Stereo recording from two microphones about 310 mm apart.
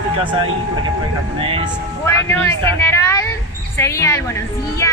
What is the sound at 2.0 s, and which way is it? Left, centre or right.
Speech, centre.